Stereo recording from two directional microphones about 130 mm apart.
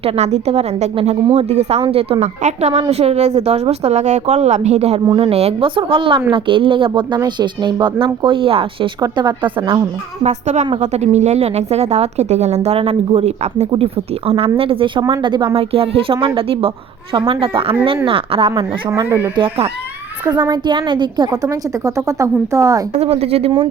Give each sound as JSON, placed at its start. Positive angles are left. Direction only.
{"t": 0.0, "sound": "speech", "side_deg": -60}
{"t": 2.4, "sound": "a woman's voice", "side_deg": -60}
{"t": 10.2, "sound": "a woman's voice", "side_deg": -65}
{"t": 19.0, "sound": "speech", "side_deg": -15}
{"t": 19.4, "sound": "speech", "side_deg": -50}
{"t": 20.5, "sound": "speech", "side_deg": -35}
{"t": 21.8, "sound": "speech", "side_deg": -25}
{"t": 23.0, "sound": "speech", "side_deg": -50}